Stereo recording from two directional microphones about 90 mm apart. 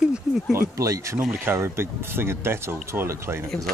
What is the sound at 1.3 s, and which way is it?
Speech, 25° right (ahead or behind).